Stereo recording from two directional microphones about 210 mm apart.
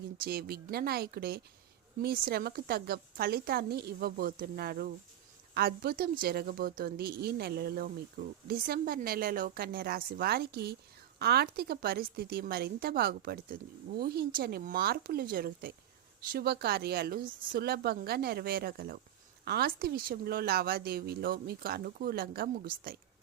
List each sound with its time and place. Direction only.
0.3 s a woman's voice: 45° right (ahead or behind)